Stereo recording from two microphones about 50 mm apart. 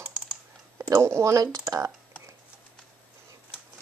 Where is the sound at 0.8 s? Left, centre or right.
Right.